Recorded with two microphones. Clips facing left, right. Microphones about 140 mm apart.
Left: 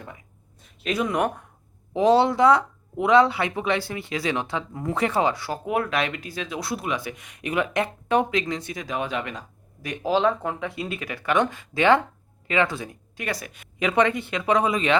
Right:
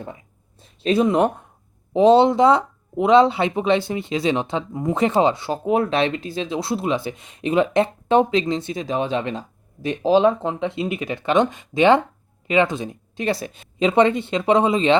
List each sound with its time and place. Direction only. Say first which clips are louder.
0.6 s speech: right 8 dB; 30° right (ahead or behind)